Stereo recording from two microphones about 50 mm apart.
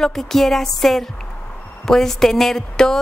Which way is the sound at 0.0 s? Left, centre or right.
Centre.